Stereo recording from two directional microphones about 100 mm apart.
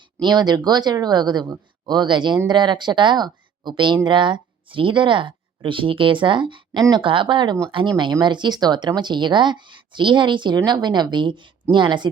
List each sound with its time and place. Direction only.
0.2 s speech: 45° right (ahead or behind)